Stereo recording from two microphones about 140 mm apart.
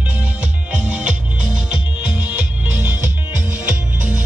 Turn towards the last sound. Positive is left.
turn(degrees=-10)  # may be behind; listen again after turning